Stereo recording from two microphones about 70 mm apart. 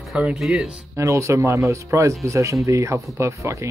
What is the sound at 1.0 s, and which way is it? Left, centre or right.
Speech, right.